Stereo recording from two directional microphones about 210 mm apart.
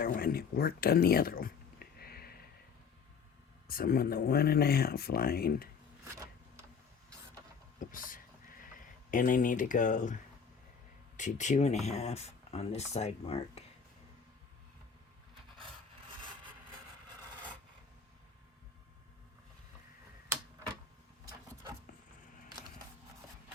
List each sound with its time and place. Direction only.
0.0 s speech: 45° left (ahead or behind)
3.7 s speech: 45° left (ahead or behind)
7.8 s a sound: 40° left (ahead or behind)
9.0 s speech: 40° left (ahead or behind)
11.2 s speech: 35° left (ahead or behind)
15.5 s wood: 25° right (ahead or behind)